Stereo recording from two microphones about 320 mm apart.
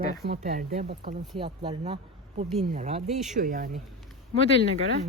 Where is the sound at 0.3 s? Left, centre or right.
Right.